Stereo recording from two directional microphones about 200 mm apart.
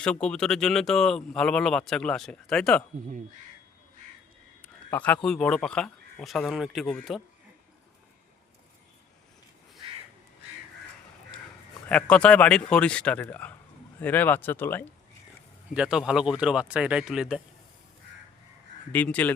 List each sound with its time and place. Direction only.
0.0 s speech: 5° left (ahead or behind)
4.9 s speech: 5° left (ahead or behind)
11.9 s speech: 5° left (ahead or behind)
15.7 s speech: 5° right (ahead or behind)
18.9 s speech: 5° left (ahead or behind)